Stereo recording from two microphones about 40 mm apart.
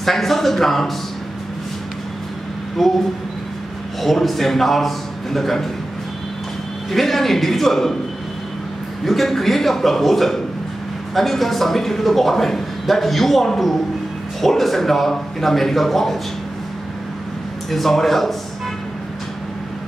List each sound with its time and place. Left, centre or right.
0.0 s a man's voice: centre
2.8 s a man's voice: centre
4.0 s a man's voice: centre
6.9 s a man's voice: centre
9.0 s a man's voice: centre
17.6 s a man's voice: centre